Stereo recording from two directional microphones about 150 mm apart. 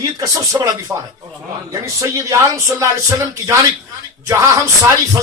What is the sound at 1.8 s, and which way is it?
Speech, 20° right (ahead or behind).